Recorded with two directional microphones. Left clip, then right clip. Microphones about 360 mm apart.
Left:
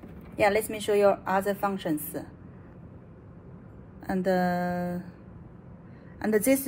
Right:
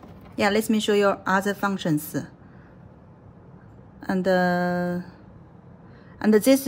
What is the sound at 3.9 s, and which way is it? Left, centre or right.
Speech, right.